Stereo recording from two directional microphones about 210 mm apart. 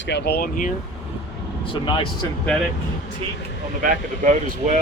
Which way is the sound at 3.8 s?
40° right (ahead or behind).